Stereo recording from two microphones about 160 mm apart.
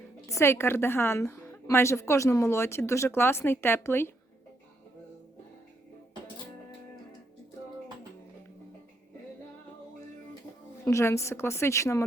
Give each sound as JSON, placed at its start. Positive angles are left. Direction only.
{"t": 0.3, "sound": "a woman's voice", "side_deg": 15}
{"t": 10.8, "sound": "a woman's voice", "side_deg": 15}